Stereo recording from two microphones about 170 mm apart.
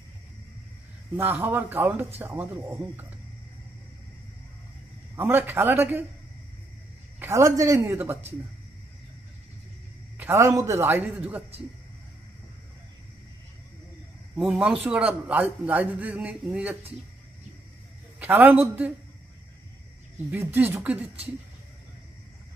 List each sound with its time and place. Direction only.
1.1 s a man's voice: 10° right (ahead or behind)
5.1 s a man's voice: 15° right (ahead or behind)
7.2 s a man's voice: 15° right (ahead or behind)
10.1 s a man's voice: 15° right (ahead or behind)
14.4 s a man's voice: 5° right (ahead or behind)
18.2 s a man's voice: 10° right (ahead or behind)
20.2 s a man's voice: 10° right (ahead or behind)